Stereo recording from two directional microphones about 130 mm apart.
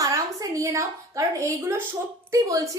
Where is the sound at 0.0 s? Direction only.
25° right (ahead or behind).